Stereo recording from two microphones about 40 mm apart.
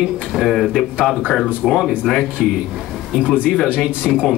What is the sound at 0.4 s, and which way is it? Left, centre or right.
A man's voice, centre.